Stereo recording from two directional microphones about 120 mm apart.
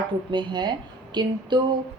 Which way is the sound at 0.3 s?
40° right (ahead or behind).